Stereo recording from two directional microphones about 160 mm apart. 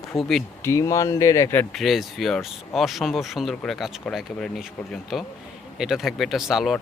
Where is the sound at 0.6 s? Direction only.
20° left (ahead or behind).